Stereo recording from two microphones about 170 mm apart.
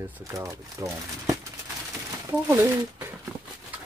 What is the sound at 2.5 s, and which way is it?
Speech, 15° right (ahead or behind).